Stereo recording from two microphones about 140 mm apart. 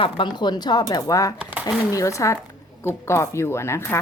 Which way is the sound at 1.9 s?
20° left (ahead or behind).